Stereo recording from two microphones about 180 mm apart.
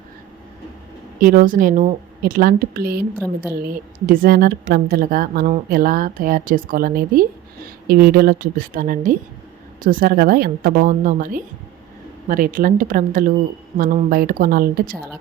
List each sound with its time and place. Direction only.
1.2 s speech: 50° right (ahead or behind)